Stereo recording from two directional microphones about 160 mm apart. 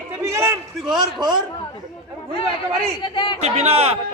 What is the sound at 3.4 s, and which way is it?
Speech, 45° right (ahead or behind).